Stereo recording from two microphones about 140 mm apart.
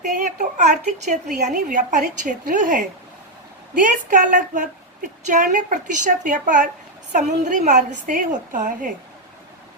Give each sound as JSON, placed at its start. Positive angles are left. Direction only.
{"t": 0.2, "sound": "a sound", "side_deg": -60}
{"t": 0.9, "sound": "a woman's voice", "side_deg": -60}
{"t": 4.1, "sound": "a woman's voice", "side_deg": -60}